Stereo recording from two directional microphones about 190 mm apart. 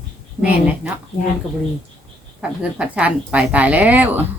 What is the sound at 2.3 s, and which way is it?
A woman's voice, 5° right (ahead or behind).